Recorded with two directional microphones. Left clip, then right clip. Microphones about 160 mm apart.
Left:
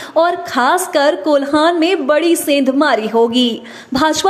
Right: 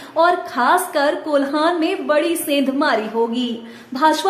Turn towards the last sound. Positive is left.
turn(degrees=50)  # may be behind; listen again after turning